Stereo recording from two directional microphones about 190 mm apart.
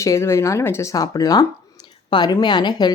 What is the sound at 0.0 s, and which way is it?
A woman's voice, 15° left (ahead or behind).